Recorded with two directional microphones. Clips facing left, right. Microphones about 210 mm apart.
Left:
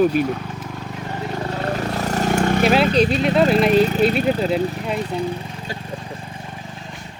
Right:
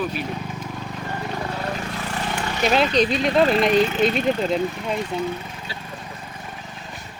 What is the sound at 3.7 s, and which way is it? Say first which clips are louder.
Speech: left 3 dB; 35° left (ahead or behind).